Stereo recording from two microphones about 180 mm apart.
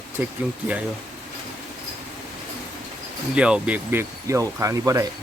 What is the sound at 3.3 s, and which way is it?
Speech, 5° right (ahead or behind).